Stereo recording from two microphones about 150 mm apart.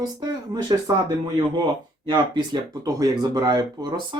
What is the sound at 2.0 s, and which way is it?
Speech, 30° right (ahead or behind).